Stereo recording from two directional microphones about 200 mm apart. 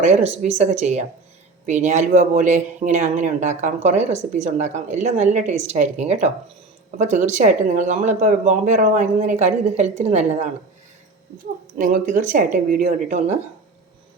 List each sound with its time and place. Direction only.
0.0 s speech: 35° right (ahead or behind)
11.8 s speech: 40° right (ahead or behind)